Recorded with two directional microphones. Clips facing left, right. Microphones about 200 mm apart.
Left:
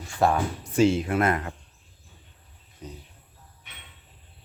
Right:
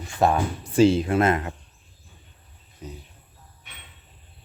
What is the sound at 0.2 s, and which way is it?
Speech, 20° right (ahead or behind).